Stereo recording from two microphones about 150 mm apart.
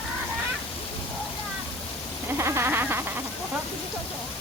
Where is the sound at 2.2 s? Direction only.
15° right (ahead or behind).